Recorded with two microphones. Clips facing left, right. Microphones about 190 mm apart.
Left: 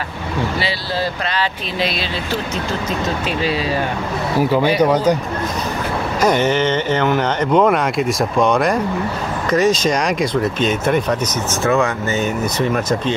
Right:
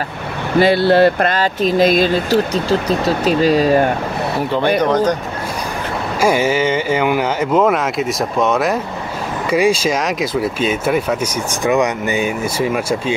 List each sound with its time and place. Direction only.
0.6 s speech: 55° right (ahead or behind)
4.4 s speech: 5° left (ahead or behind)
6.2 s speech: 10° right (ahead or behind)